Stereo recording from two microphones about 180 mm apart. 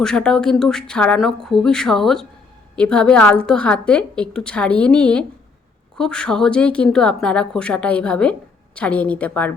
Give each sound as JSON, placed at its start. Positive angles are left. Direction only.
{"t": 0.0, "sound": "a woman's voice", "side_deg": 5}